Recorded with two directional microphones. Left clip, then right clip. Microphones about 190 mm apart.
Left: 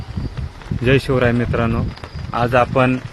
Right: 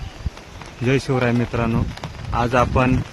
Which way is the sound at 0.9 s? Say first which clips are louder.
Left 4 dB; 10° left (ahead or behind).